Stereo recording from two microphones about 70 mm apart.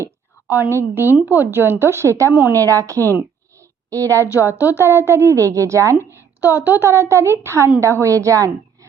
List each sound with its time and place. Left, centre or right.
0.5 s a woman's voice: right
4.8 s a woman's voice: right
6.1 s a woman's voice: right